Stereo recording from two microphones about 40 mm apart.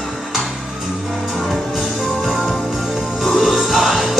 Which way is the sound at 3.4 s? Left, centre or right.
Centre.